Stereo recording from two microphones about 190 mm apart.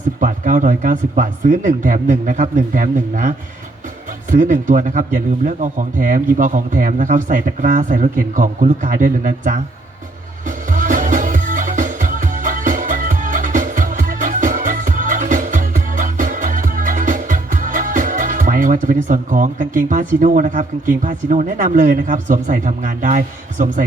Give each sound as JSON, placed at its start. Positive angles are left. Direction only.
{"t": 0.2, "sound": "speech", "side_deg": -45}
{"t": 10.7, "sound": "music", "side_deg": -45}